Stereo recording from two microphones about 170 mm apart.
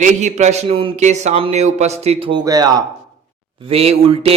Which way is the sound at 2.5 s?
20° right (ahead or behind).